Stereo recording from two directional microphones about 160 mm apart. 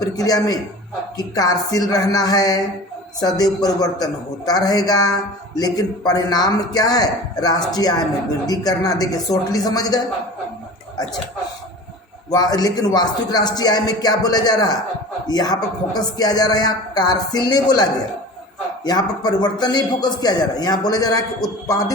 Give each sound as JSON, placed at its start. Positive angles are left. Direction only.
{"t": 0.0, "sound": "a man's voice", "side_deg": 25}
{"t": 12.3, "sound": "a man's voice", "side_deg": 25}
{"t": 18.9, "sound": "a man's voice", "side_deg": 25}